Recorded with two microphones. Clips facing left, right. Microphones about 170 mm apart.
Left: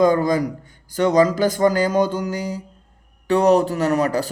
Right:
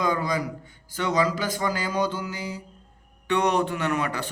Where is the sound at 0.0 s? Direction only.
45° left (ahead or behind).